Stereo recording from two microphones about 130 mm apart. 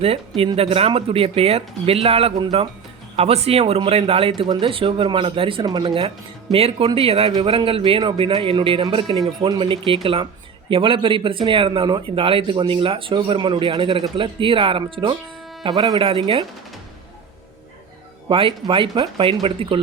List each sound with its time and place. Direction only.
0.0 s speech: 50° right (ahead or behind)
18.3 s speech: 40° right (ahead or behind)